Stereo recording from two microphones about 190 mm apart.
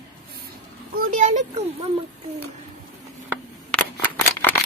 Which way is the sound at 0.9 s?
45° right (ahead or behind).